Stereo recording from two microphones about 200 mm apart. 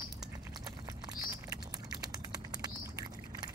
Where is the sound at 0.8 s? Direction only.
15° right (ahead or behind).